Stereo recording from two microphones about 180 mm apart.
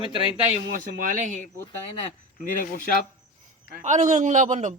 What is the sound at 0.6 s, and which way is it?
Speech, 50° right (ahead or behind).